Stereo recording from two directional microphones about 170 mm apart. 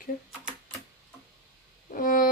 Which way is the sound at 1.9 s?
55° left (ahead or behind).